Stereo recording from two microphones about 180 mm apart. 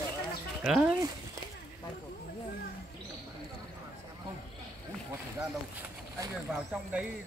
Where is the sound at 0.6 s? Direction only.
5° right (ahead or behind).